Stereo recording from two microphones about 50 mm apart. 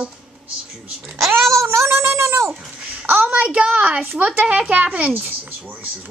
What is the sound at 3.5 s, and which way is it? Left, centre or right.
Speech, centre.